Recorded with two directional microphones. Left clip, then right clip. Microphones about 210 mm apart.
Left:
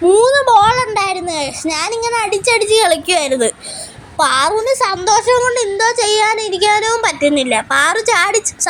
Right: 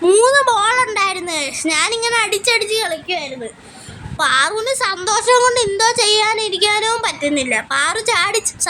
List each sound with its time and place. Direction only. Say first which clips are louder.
0.0 s a sound: left 2 dB; centre (ahead or behind)
2.6 s a woman's voice: left 6 dB; 30° left (ahead or behind)
2.8 s a woman's voice: left 8 dB; 50° left (ahead or behind)
4.2 s speech: left 2 dB; 10° left (ahead or behind)